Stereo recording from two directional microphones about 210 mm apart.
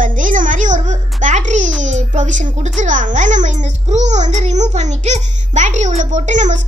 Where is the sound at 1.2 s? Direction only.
35° right (ahead or behind).